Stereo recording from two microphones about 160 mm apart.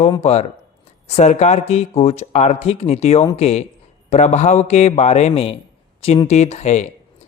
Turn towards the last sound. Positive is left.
turn(degrees=45)  # may be behind; listen again after turning